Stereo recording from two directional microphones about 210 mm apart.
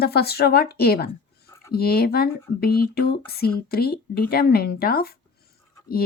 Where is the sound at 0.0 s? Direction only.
50° left (ahead or behind).